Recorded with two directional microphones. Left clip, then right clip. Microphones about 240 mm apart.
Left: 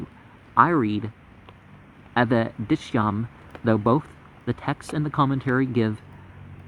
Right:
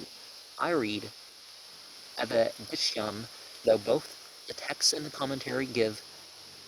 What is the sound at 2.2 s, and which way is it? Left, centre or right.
Speech, right.